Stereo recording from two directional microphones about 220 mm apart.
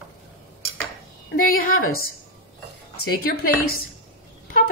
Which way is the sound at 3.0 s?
45° left (ahead or behind).